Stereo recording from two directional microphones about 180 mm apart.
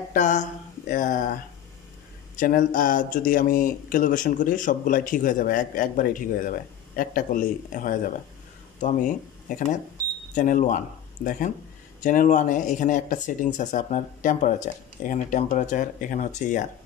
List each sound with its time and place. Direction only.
0.1 s speech: 45° left (ahead or behind)
10.3 s speech: 45° left (ahead or behind)